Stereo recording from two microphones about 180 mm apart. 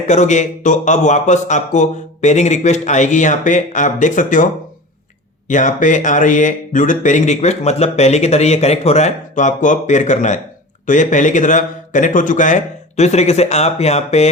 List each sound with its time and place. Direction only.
0.1 s speech: 40° left (ahead or behind)
5.5 s speech: 45° left (ahead or behind)